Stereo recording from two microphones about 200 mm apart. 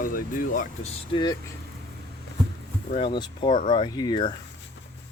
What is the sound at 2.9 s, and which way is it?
Speech, 25° left (ahead or behind).